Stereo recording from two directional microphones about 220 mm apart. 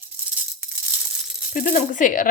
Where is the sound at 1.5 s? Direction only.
35° left (ahead or behind).